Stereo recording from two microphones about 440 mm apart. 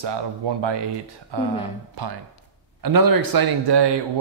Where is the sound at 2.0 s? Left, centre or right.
Right.